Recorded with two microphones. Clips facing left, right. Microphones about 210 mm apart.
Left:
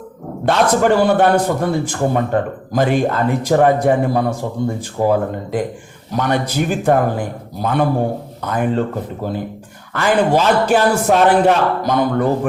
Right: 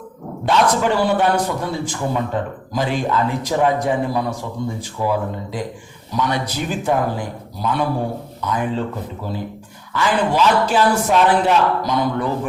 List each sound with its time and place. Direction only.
0.4 s a man's voice: 50° left (ahead or behind)
9.9 s a man's voice: 55° left (ahead or behind)